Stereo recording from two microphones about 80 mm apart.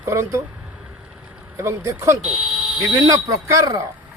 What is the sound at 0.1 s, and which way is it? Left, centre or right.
Speech, right.